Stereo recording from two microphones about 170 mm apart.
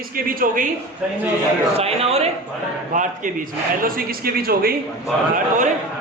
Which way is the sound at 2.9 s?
50° right (ahead or behind).